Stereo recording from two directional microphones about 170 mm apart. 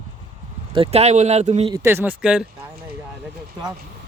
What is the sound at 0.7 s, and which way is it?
Speech, 35° right (ahead or behind).